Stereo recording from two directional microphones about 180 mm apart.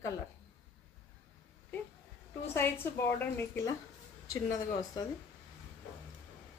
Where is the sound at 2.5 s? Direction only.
15° left (ahead or behind).